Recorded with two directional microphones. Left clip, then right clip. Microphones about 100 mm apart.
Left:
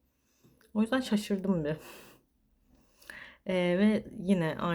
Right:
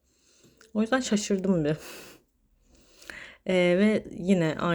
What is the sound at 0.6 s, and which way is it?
Speech, 25° right (ahead or behind).